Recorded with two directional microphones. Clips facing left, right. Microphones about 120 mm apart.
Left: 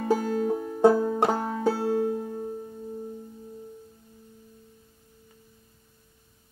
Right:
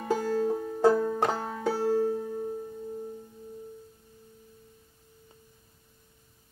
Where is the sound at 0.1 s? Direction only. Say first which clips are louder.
Left 1 dB; 15° left (ahead or behind).